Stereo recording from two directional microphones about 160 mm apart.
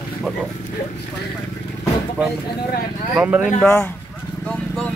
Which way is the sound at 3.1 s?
10° right (ahead or behind).